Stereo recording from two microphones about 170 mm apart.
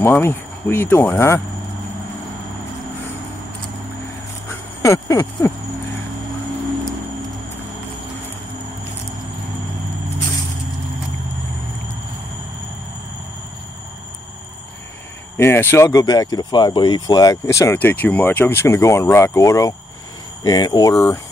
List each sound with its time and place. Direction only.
0.0 s speech: 15° left (ahead or behind)
4.8 s speech: 15° left (ahead or behind)
15.3 s speech: 15° left (ahead or behind)